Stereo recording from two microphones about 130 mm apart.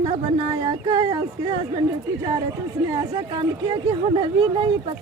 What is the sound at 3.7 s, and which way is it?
Speech, 40° right (ahead or behind).